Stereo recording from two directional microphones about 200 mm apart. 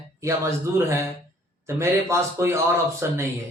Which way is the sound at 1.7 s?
15° right (ahead or behind).